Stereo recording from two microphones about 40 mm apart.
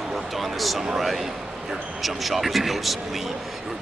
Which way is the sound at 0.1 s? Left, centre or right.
Centre.